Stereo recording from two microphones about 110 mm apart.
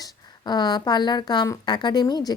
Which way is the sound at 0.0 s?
40° left (ahead or behind).